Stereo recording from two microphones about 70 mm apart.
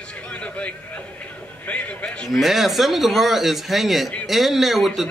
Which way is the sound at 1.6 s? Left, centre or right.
Left.